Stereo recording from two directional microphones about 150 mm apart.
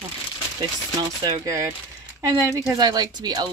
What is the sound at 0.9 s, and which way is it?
Speech, 25° right (ahead or behind).